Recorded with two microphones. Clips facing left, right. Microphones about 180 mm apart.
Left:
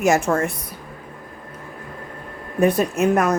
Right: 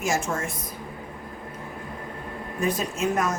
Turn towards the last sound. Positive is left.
turn(degrees=65)  # may be behind; listen again after turning